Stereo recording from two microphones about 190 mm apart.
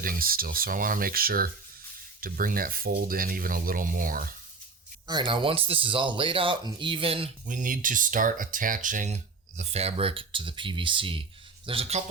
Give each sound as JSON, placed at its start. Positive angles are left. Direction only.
{"t": 0.0, "sound": "speech", "side_deg": -50}
{"t": 5.0, "sound": "speech", "side_deg": -25}
{"t": 7.4, "sound": "speech", "side_deg": -45}